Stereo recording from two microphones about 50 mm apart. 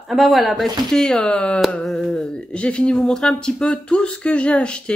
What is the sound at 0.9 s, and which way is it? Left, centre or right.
Speech, centre.